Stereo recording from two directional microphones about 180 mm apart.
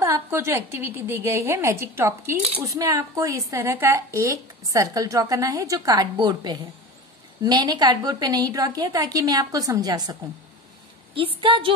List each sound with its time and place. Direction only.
0.0 s a woman's voice: 15° right (ahead or behind)
11.1 s a woman's voice: 30° right (ahead or behind)